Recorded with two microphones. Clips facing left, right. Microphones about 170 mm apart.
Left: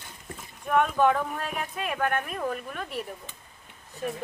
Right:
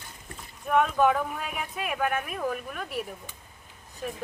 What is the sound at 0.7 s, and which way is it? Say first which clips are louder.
Speech: even; centre (ahead or behind).